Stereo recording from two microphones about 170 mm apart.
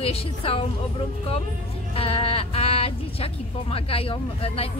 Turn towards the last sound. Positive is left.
turn(degrees=35)  # may be behind; listen again after turning